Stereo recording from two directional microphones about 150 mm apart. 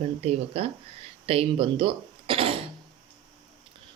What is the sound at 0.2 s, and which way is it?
Speech, 40° right (ahead or behind).